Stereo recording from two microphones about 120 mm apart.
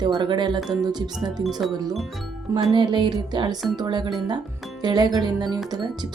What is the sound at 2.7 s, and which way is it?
Speech, 40° right (ahead or behind).